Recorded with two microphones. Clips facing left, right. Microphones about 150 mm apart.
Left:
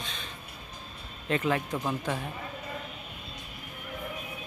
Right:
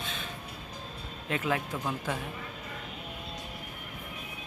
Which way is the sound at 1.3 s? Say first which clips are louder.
Left 3 dB; 5° right (ahead or behind).